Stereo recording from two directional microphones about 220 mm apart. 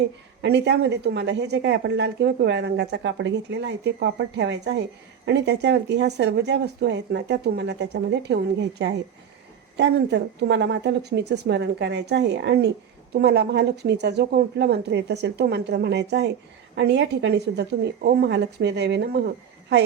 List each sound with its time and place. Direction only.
0.4 s a woman's voice: 50° right (ahead or behind)